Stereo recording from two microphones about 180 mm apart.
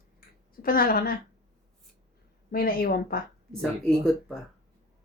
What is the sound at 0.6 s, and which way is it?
Speech, 55° left (ahead or behind).